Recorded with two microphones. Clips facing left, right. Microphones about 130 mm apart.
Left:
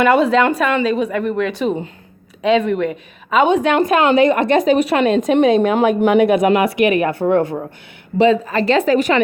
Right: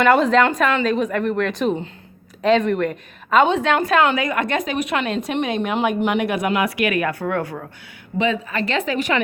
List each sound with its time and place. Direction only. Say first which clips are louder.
0.0 s a woman's voice: left 2 dB; 5° left (ahead or behind)
4.1 s a woman's voice: left 9 dB; 30° left (ahead or behind)
6.7 s speech: left 6 dB; 25° left (ahead or behind)
8.2 s a woman's voice: left 8 dB; 35° left (ahead or behind)